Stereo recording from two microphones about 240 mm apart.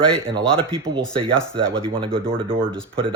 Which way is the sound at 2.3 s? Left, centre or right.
Right.